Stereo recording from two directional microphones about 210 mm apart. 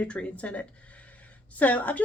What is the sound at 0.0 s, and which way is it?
Speech, 5° left (ahead or behind).